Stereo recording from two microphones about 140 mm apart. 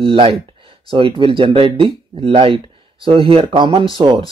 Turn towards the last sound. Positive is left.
turn(degrees=-35)  # may be behind; listen again after turning